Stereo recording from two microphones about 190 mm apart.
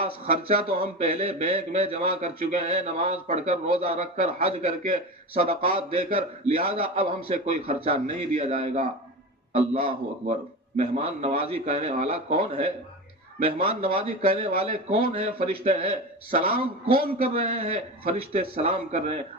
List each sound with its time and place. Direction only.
0.0 s a man's voice: 30° right (ahead or behind)